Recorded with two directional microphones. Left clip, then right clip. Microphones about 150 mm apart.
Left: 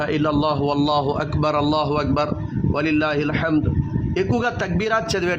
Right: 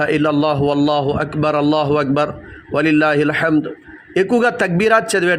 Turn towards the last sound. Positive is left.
turn(degrees=-20)  # may be behind; listen again after turning